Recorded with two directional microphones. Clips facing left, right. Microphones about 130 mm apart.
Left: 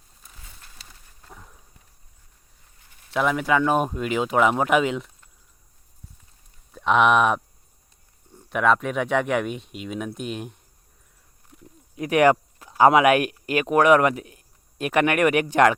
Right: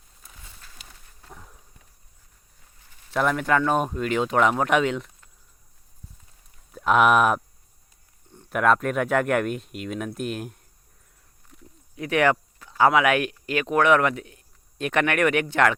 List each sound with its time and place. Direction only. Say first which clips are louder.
1.3 s a sound: even; centre (ahead or behind)
3.1 s speech: left 1 dB; 5° left (ahead or behind)
6.7 s speech: even; 5° right (ahead or behind)
8.4 s speech: even; centre (ahead or behind)
11.9 s speech: left 4 dB; 15° left (ahead or behind)